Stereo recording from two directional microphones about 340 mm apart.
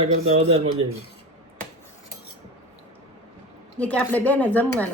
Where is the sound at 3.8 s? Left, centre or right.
Centre.